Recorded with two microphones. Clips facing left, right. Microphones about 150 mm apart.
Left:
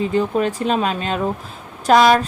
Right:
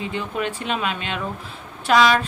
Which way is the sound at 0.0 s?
40° left (ahead or behind).